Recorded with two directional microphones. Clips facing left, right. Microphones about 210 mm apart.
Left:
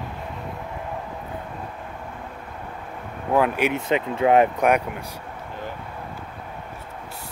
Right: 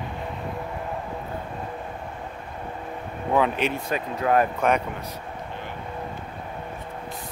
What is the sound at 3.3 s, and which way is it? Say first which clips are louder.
Speech: left 2 dB; 10° left (ahead or behind).